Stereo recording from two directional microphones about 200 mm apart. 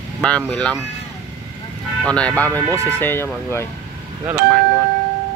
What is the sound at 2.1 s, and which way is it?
Speech, 5° left (ahead or behind).